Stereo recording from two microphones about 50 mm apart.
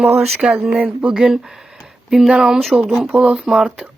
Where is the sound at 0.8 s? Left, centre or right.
Right.